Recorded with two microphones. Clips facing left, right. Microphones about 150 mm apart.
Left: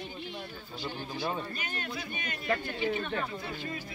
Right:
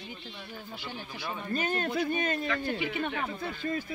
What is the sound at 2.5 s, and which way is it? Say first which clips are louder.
Speech: left 1 dB; 40° left (ahead or behind).